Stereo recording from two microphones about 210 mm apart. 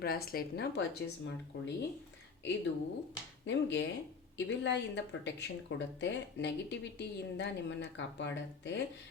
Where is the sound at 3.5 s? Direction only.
60° left (ahead or behind).